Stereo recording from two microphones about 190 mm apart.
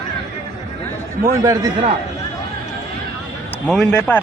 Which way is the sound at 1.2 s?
15° right (ahead or behind).